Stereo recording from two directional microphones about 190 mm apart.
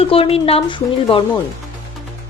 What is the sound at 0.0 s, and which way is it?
Speech, 30° left (ahead or behind).